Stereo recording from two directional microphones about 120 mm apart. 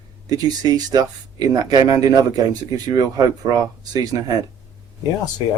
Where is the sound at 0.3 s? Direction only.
35° right (ahead or behind).